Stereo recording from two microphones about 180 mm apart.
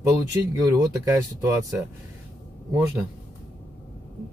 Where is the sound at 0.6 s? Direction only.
20° right (ahead or behind).